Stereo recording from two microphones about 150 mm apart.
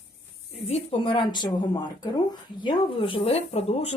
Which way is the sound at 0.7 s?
40° left (ahead or behind).